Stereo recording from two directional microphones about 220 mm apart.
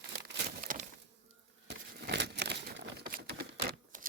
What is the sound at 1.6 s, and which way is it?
Crumpling, 50° right (ahead or behind).